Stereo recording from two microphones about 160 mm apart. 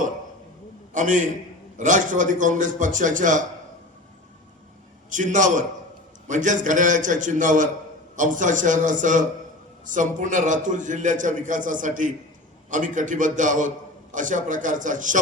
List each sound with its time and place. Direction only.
0.9 s a man's voice: 50° right (ahead or behind)
5.1 s a man's voice: 50° right (ahead or behind)